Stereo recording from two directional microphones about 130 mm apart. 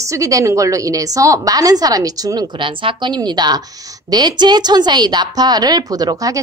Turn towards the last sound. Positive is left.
turn(degrees=-30)  # may be behind; listen again after turning